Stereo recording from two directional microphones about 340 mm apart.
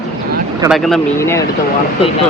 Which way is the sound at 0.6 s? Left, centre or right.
Centre.